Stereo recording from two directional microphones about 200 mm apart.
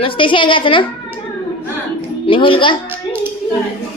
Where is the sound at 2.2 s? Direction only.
25° left (ahead or behind).